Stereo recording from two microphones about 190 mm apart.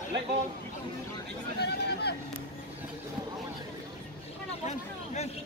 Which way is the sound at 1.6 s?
60° left (ahead or behind).